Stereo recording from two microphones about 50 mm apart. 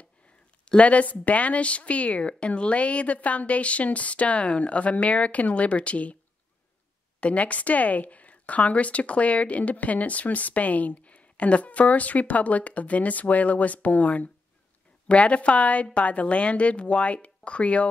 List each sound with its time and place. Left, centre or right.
0.7 s a woman's voice: left
7.2 s a woman's voice: left